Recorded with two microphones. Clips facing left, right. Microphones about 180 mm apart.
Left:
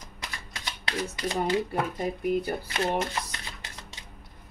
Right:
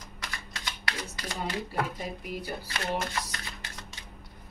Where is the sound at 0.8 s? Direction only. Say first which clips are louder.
Left 7 dB; 25° left (ahead or behind).